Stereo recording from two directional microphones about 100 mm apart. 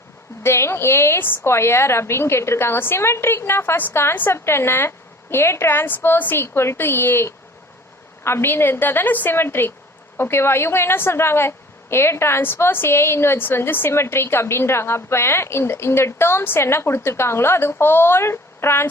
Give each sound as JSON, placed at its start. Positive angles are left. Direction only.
{"t": 0.4, "sound": "a woman's voice", "side_deg": 25}